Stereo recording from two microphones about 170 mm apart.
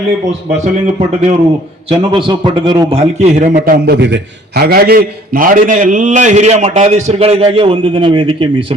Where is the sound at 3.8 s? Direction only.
90° right.